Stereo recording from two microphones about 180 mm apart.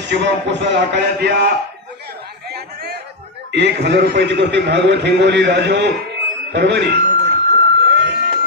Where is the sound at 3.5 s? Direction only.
70° right (ahead or behind).